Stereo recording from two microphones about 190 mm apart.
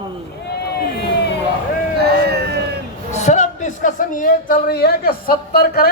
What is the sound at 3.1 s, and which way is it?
A man's voice, 40° left (ahead or behind).